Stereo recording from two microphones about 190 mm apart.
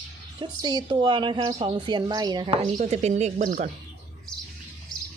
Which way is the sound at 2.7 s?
35° right (ahead or behind).